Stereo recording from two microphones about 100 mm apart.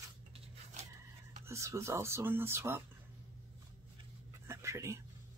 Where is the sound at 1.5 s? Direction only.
30° right (ahead or behind).